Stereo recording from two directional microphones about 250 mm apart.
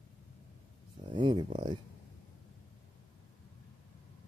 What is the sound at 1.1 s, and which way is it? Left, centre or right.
Speech, centre.